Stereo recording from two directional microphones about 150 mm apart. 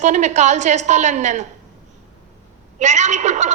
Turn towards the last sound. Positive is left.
turn(degrees=-50)  # may be behind; listen again after turning